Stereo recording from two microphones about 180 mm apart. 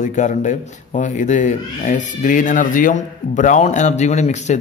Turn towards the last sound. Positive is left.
turn(degrees=40)  # may be behind; listen again after turning